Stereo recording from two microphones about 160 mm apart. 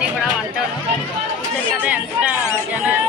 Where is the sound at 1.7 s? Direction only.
10° right (ahead or behind).